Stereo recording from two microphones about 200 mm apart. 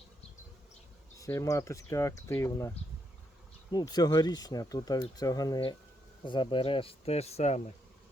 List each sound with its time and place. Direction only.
1.2 s speech: 15° left (ahead or behind); by 7.6 s 30° left (ahead or behind)